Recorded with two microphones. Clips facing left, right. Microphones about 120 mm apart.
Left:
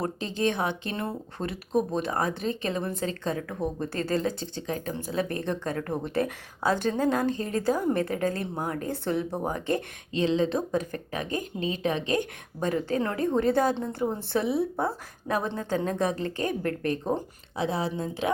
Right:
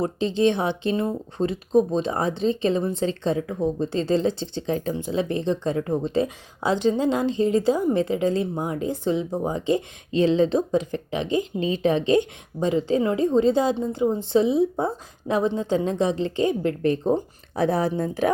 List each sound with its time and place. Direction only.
0.0 s speech: 25° right (ahead or behind)
10.1 s speech: 35° right (ahead or behind)
17.5 s speech: 50° right (ahead or behind)